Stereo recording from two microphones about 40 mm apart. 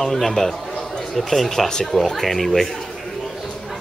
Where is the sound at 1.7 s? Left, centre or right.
Centre.